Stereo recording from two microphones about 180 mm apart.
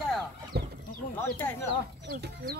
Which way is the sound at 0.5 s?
60° right (ahead or behind).